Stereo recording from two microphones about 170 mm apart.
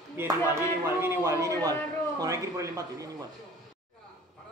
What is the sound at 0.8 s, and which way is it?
A man's voice, 15° right (ahead or behind).